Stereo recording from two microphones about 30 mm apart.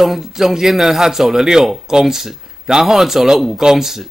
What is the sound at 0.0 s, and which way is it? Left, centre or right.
Speech, centre.